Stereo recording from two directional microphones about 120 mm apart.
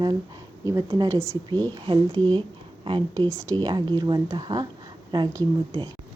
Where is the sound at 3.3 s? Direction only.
25° right (ahead or behind).